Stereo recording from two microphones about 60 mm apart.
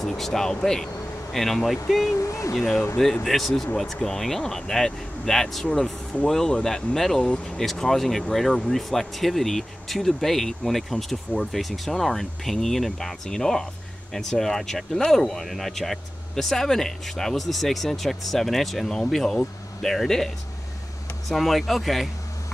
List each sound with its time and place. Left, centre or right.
0.0 s speech: centre
2.1 s speech: left
2.5 s speech: centre
7.2 s speech: centre
7.5 s speech: centre
21.3 s speech: centre